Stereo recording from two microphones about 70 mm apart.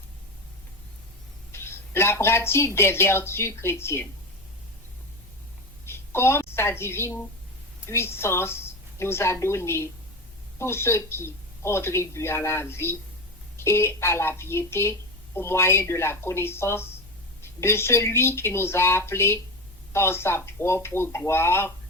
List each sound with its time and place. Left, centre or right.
1.5 s speech: left
5.9 s a woman's voice: left